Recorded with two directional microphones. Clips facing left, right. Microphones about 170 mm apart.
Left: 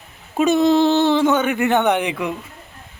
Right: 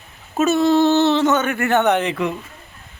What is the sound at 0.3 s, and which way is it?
Speech, 15° left (ahead or behind).